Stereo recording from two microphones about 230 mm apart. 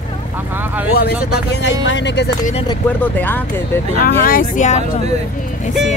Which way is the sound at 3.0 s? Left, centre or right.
Centre.